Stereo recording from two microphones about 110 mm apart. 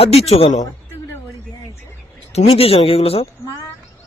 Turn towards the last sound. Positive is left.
turn(degrees=60)  # may be behind; listen again after turning